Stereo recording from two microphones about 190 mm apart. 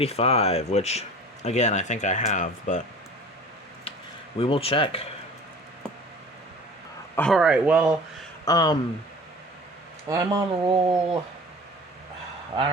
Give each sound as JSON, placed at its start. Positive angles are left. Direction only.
{"t": 0.0, "sound": "speech", "side_deg": 30}
{"t": 4.4, "sound": "speech", "side_deg": 30}
{"t": 7.2, "sound": "speech", "side_deg": 0}
{"t": 8.4, "sound": "speech", "side_deg": 20}
{"t": 10.1, "sound": "speech", "side_deg": -20}